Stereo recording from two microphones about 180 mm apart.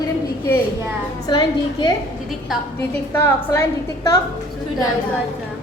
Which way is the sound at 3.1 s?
15° left (ahead or behind).